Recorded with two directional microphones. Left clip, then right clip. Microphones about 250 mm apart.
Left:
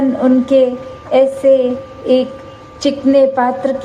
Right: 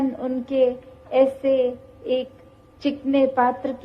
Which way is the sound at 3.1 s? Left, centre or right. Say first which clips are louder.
Left 8 dB; right.